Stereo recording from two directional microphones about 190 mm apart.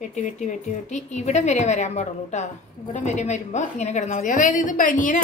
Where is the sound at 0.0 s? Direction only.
40° left (ahead or behind).